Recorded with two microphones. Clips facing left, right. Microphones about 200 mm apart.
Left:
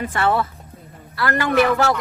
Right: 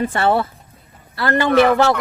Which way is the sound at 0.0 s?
30° right (ahead or behind).